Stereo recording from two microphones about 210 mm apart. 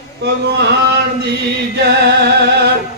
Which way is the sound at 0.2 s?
50° right (ahead or behind).